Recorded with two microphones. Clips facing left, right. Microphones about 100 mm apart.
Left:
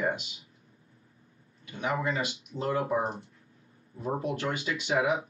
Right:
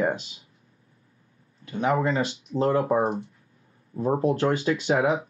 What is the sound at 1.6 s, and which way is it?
Speech, 35° right (ahead or behind).